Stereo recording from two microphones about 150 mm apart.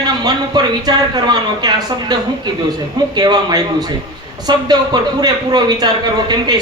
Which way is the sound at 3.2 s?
25° right (ahead or behind).